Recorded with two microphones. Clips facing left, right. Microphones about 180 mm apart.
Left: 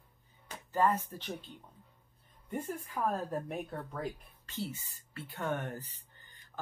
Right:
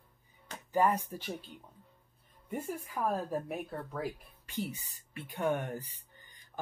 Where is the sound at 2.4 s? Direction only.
10° right (ahead or behind).